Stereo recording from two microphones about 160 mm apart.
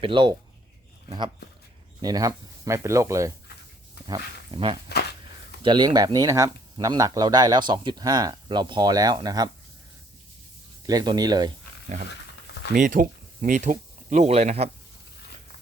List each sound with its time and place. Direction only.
0.0 s speech: 30° right (ahead or behind)
2.0 s speech: 25° right (ahead or behind)
4.5 s speech: 35° right (ahead or behind)
10.8 s speech: 25° right (ahead or behind)
12.7 s speech: 55° right (ahead or behind); by 14.7 s 40° right (ahead or behind)